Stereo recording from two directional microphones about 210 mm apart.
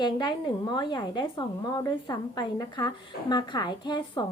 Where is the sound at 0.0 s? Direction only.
20° left (ahead or behind).